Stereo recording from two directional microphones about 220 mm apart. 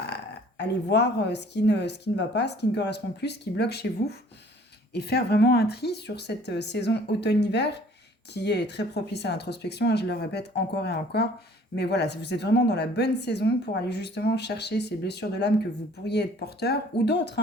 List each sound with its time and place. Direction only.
0.1 s a woman's voice: 50° left (ahead or behind)
4.9 s a woman's voice: 50° left (ahead or behind)